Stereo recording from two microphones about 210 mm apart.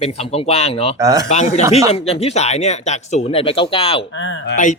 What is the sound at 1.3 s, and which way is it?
Speech, 35° left (ahead or behind).